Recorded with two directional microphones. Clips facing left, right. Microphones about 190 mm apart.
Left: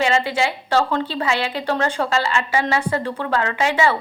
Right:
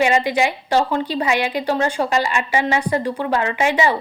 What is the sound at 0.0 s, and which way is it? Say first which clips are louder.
A woman's voice: right 2 dB; 15° right (ahead or behind).